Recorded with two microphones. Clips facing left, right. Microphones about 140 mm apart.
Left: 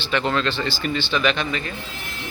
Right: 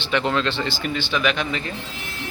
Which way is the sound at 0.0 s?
15° right (ahead or behind).